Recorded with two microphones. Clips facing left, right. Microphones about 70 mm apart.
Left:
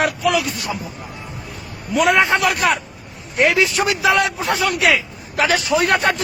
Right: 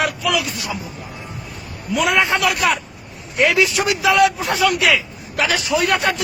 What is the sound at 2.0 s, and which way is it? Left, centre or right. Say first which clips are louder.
A man's voice: left 2 dB; left.